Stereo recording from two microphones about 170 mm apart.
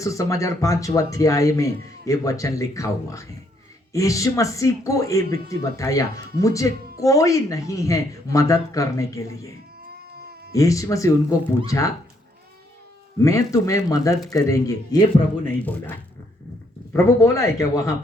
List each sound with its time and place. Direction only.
0.0 s speech: 20° left (ahead or behind)
10.5 s speech: 20° left (ahead or behind)
13.1 s speech: 20° left (ahead or behind)